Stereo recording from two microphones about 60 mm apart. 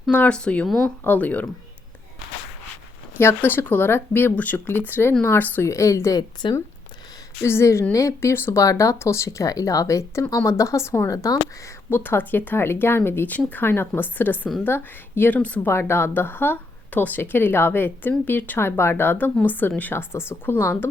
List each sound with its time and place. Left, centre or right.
0.1 s speech: left
3.2 s speech: left
5.6 s speech: left
7.4 s speech: left
9.0 s speech: left
9.5 s speech: left
11.1 s speech: left
11.9 s speech: left
15.3 s speech: left
15.6 s speech: left
19.9 s speech: left